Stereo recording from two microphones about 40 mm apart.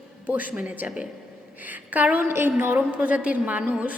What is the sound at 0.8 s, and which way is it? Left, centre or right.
Speech, right.